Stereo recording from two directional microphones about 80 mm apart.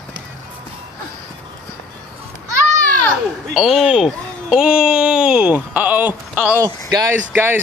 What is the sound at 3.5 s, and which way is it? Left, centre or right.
Speech, centre.